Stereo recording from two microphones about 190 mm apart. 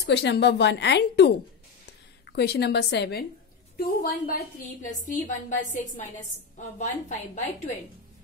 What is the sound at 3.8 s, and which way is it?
A woman's voice, 50° left (ahead or behind).